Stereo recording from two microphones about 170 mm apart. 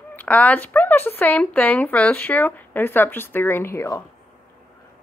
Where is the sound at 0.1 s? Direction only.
10° left (ahead or behind).